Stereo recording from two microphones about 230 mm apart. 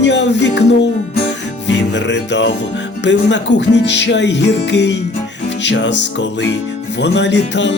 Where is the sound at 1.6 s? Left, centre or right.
Left.